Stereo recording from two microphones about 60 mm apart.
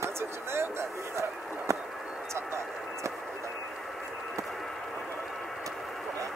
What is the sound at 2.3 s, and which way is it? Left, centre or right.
Vehicle, right.